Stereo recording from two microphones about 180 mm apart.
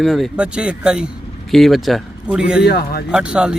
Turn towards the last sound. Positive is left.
turn(degrees=-5)  # may be behind; listen again after turning